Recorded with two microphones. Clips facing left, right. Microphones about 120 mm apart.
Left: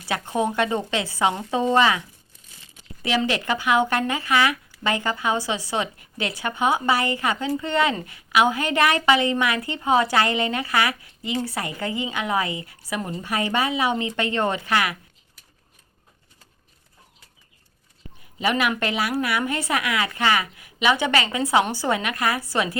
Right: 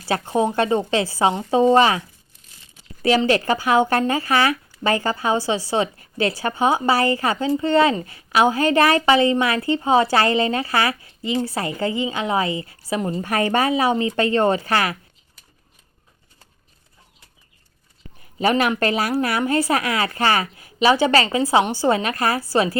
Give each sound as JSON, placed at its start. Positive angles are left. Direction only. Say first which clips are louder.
{"t": 0.0, "sound": "a woman's voice", "louder": "right 4 dB", "side_deg": -30}
{"t": 3.2, "sound": "a woman's voice", "louder": "right 4 dB", "side_deg": -35}
{"t": 13.2, "sound": "a woman's voice", "louder": "right 4 dB", "side_deg": -50}
{"t": 18.3, "sound": "a woman's voice", "louder": "right 4 dB", "side_deg": -40}